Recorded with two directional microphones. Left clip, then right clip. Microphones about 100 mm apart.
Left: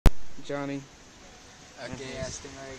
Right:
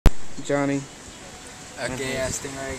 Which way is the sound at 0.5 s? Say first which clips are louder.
Right 10 dB; centre (ahead or behind).